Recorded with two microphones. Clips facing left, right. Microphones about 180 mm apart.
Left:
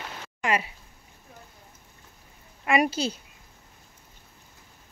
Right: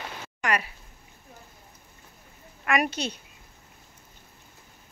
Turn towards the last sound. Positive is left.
turn(degrees=30)  # may be behind; listen again after turning